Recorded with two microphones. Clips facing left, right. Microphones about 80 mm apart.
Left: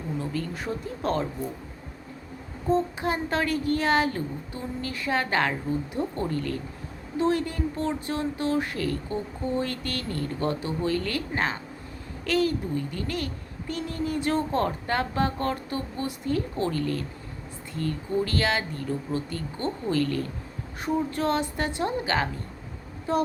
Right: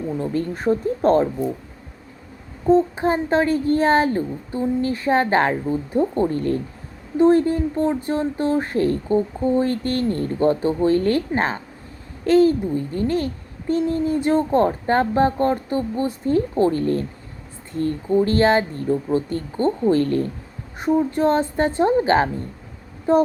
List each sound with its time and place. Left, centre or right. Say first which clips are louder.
0.2 s a woman's voice: right 7 dB; right
2.6 s a woman's voice: right 8 dB; right